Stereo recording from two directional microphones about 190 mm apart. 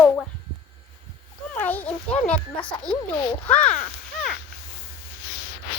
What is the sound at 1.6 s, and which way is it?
A child's voice, 10° left (ahead or behind).